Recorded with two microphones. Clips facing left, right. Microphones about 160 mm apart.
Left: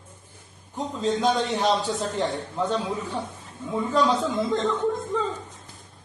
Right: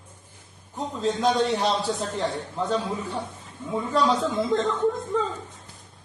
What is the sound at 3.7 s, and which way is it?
Speech, centre (ahead or behind).